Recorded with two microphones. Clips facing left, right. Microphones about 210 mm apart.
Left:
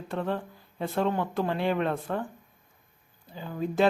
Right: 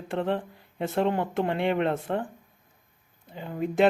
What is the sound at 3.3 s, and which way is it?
Speech, 25° right (ahead or behind).